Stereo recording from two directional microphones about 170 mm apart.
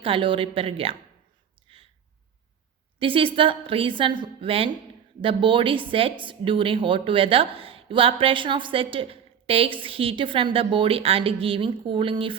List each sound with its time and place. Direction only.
0.0 s speech: 30° right (ahead or behind)
1.6 s a sound: 35° right (ahead or behind)
3.0 s speech: 30° right (ahead or behind)